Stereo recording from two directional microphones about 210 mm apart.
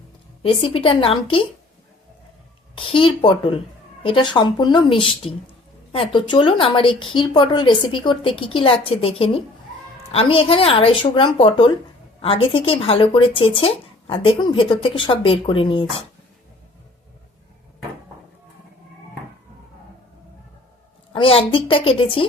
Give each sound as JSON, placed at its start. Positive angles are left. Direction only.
{"t": 0.4, "sound": "speech", "side_deg": 25}
{"t": 2.7, "sound": "speech", "side_deg": 25}
{"t": 21.1, "sound": "speech", "side_deg": 25}